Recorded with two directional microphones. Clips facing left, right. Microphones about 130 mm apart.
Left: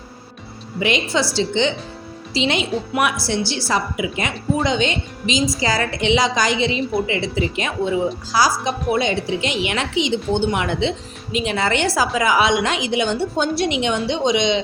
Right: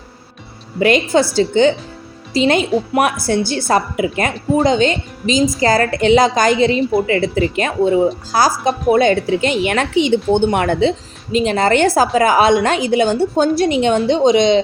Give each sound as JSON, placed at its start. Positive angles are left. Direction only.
{"t": 0.8, "sound": "a woman's voice", "side_deg": -50}